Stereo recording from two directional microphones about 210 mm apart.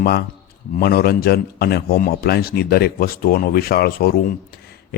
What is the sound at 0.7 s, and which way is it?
A man's voice, 45° left (ahead or behind).